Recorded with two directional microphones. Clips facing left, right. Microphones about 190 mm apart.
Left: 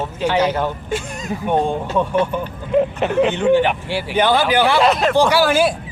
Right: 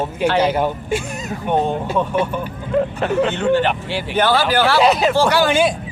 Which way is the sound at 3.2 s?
15° left (ahead or behind).